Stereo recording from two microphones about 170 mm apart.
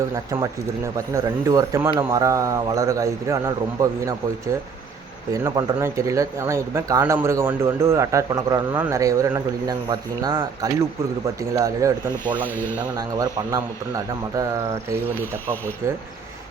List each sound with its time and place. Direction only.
0.9 s speech: 20° right (ahead or behind)
5.3 s speech: 20° right (ahead or behind)
12.2 s speech: 10° left (ahead or behind)
13.1 s speech: 20° right (ahead or behind)